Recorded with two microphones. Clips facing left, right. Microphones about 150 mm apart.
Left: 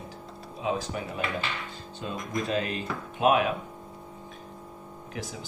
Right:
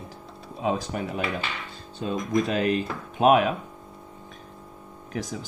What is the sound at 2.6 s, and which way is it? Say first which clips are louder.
Speech: right 7 dB; 45° right (ahead or behind).